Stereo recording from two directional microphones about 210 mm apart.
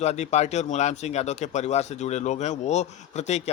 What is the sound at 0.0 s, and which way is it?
Speech, 30° left (ahead or behind).